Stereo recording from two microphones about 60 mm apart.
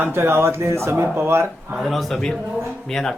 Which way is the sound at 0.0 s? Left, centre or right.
Right.